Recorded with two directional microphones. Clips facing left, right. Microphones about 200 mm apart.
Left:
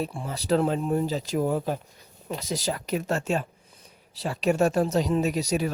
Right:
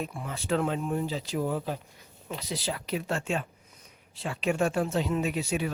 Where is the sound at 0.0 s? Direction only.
35° left (ahead or behind).